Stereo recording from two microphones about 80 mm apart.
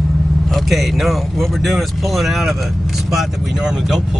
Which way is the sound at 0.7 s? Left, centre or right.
Centre.